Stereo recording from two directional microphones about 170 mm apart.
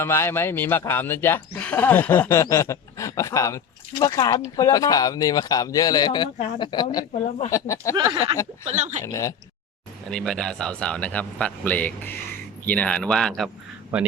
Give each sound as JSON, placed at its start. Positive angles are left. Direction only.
{"t": 0.0, "sound": "speech", "side_deg": 15}
{"t": 7.9, "sound": "a sound", "side_deg": -25}
{"t": 8.6, "sound": "speech", "side_deg": -45}
{"t": 9.0, "sound": "speech", "side_deg": 20}
{"t": 10.1, "sound": "speech", "side_deg": 5}